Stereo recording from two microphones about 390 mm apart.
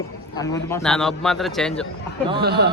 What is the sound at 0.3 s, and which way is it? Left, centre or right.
Speech, centre.